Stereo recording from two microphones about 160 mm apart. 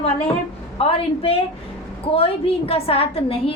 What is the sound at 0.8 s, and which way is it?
A woman's voice, 35° left (ahead or behind).